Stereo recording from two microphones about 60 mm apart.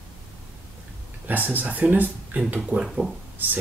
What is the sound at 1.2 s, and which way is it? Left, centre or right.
Speech, right.